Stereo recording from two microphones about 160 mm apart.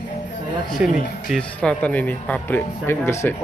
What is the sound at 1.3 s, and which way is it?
Speech, 5° left (ahead or behind).